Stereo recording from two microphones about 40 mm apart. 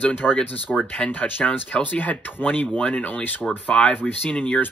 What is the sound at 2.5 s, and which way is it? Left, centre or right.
Speech, left.